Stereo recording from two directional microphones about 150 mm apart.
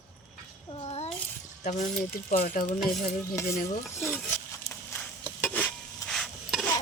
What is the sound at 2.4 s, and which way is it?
Speech, 65° left (ahead or behind).